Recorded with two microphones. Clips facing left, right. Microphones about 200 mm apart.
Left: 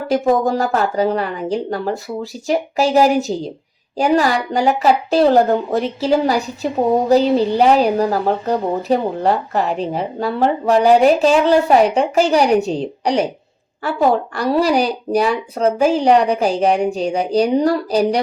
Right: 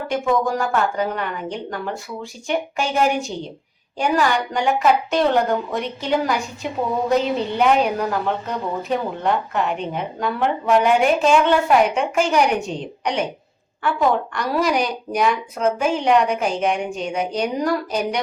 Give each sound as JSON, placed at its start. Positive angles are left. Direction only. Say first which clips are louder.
{"t": 0.1, "sound": "a woman's voice", "louder": "left 5 dB", "side_deg": 40}